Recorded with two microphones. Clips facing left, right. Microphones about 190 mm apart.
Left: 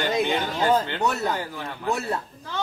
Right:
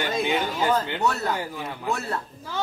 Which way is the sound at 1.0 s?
15° left (ahead or behind).